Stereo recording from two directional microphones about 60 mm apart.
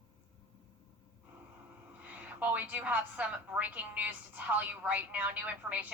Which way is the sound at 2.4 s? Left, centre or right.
Right.